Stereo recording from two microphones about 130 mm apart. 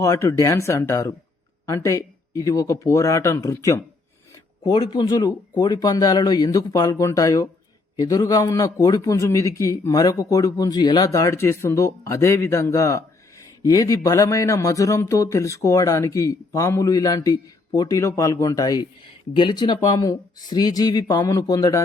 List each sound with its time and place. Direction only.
0.0 s a man's voice: 25° left (ahead or behind)
4.6 s a man's voice: 35° left (ahead or behind)